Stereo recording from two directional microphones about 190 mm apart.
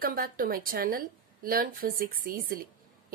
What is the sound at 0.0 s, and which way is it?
A woman's voice, 50° right (ahead or behind).